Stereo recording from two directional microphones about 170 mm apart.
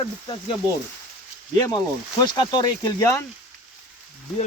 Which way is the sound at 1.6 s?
25° left (ahead or behind).